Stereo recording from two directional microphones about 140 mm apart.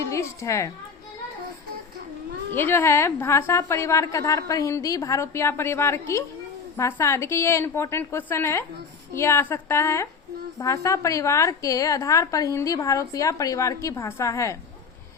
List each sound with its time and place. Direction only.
0.0 s a woman's voice: 20° left (ahead or behind)
2.5 s a woman's voice: 15° left (ahead or behind)